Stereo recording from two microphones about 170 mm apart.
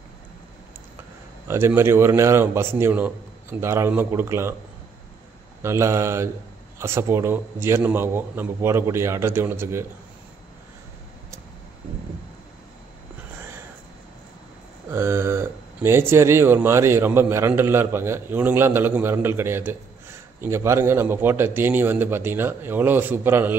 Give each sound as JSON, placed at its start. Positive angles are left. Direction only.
{"t": 1.5, "sound": "speech", "side_deg": -15}
{"t": 5.6, "sound": "speech", "side_deg": -15}
{"t": 14.9, "sound": "speech", "side_deg": -15}